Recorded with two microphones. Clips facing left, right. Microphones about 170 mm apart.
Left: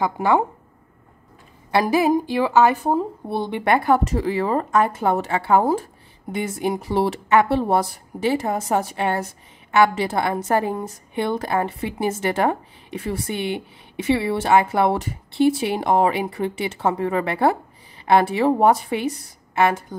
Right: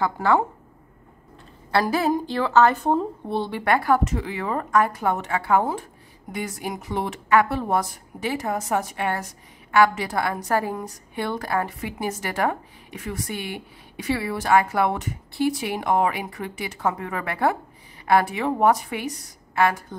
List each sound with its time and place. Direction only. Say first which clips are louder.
0.0 s a woman's voice: left 2 dB; 20° left (ahead or behind)
1.7 s a woman's voice: left 4 dB; 15° left (ahead or behind)
4.1 s speech: left 6 dB; 35° left (ahead or behind)
6.3 s speech: left 6 dB; 25° left (ahead or behind)